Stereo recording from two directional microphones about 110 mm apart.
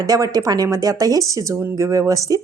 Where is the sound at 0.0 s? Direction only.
35° right (ahead or behind).